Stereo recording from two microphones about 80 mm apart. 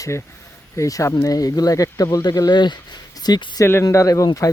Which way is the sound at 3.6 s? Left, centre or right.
Left.